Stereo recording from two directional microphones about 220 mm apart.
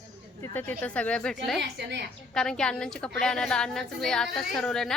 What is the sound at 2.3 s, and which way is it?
A woman's voice, 5° left (ahead or behind).